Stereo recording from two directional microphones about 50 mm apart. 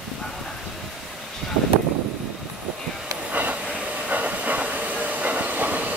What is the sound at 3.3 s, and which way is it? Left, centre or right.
Train, right.